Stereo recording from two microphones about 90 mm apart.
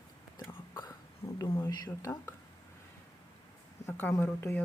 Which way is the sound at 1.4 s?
45° left (ahead or behind).